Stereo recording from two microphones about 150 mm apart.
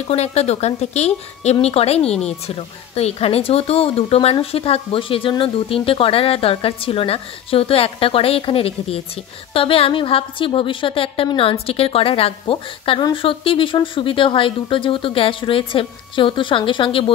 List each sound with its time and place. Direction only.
0.1 s a woman's voice: 45° left (ahead or behind)